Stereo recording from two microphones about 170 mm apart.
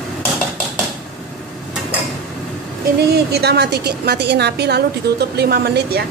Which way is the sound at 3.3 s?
70° right (ahead or behind).